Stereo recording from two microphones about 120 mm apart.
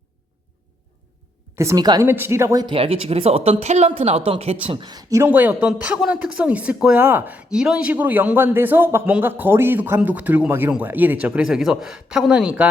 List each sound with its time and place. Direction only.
1.5 s speech: 30° right (ahead or behind)
2.0 s speech: 20° right (ahead or behind)
2.6 s speech: 50° right (ahead or behind)
4.9 s speech: 30° right (ahead or behind); by 12.6 s 10° right (ahead or behind)